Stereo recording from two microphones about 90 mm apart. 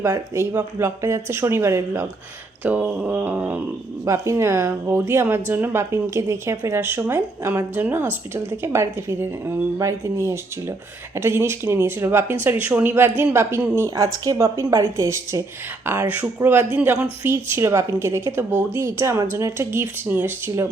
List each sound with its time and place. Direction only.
0.0 s a woman's voice: 35° right (ahead or behind)
2.6 s a sound: 15° right (ahead or behind)
4.0 s a woman's voice: 35° right (ahead or behind)
15.9 s a woman's voice: 20° right (ahead or behind)